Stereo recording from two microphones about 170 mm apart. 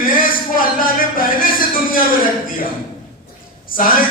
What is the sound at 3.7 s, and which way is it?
Speech, 55° left (ahead or behind).